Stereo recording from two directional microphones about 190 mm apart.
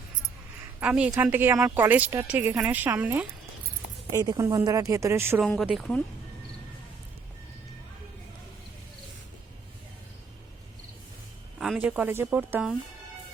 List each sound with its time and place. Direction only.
0.8 s speech: 5° right (ahead or behind)
5.4 s speech: centre (ahead or behind)
11.6 s speech: 5° right (ahead or behind)